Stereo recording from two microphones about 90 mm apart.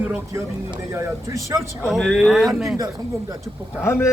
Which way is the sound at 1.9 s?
5° left (ahead or behind).